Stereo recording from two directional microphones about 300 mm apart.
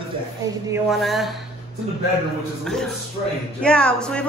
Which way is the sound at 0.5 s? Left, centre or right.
Centre.